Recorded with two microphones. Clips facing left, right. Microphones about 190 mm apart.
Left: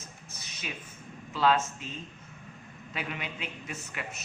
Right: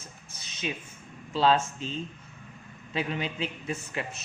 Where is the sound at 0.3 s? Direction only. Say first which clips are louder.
Right 8 dB; 30° right (ahead or behind).